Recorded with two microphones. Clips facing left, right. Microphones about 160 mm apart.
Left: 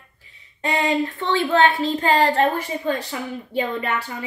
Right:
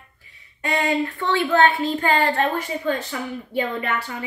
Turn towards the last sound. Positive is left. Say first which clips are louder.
# left 1 dB
turn(degrees=35)  # may be behind; listen again after turning